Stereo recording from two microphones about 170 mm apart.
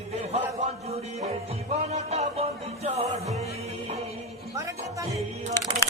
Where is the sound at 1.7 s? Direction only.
40° right (ahead or behind).